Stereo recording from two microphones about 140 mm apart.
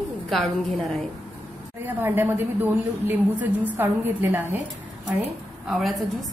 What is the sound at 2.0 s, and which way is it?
A woman's voice, 15° right (ahead or behind).